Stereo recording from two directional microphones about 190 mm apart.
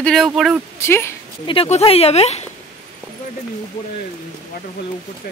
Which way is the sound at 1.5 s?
30° left (ahead or behind).